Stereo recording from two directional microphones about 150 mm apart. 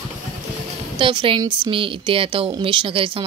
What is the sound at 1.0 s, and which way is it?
A woman's voice, 35° right (ahead or behind).